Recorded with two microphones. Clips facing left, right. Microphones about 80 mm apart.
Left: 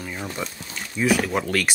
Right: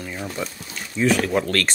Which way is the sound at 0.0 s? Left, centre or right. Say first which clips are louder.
Right 1 dB; centre.